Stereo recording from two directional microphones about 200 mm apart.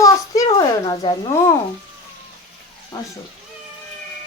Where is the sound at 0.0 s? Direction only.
20° left (ahead or behind).